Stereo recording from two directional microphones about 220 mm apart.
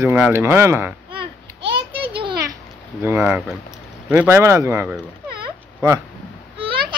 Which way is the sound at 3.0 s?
10° right (ahead or behind).